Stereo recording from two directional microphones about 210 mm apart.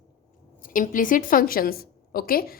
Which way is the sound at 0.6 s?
40° left (ahead or behind).